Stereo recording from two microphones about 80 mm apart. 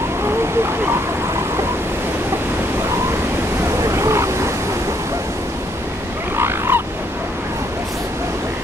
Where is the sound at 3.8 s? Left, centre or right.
Right.